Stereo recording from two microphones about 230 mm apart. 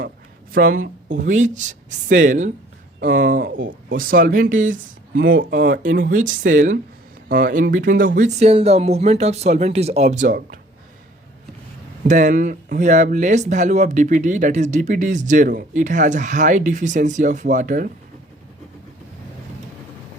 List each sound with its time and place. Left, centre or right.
0.5 s speech: right
12.0 s speech: right